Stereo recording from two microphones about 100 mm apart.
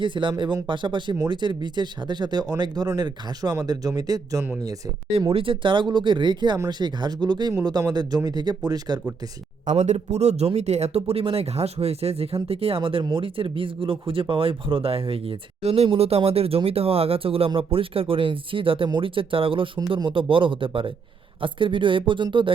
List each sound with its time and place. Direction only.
0.0 s speech: 55° right (ahead or behind); by 4.4 s 35° right (ahead or behind)
5.3 s speech: 65° right (ahead or behind); by 9.0 s 40° right (ahead or behind)
10.1 s speech: 90° right; by 22.5 s 55° right (ahead or behind)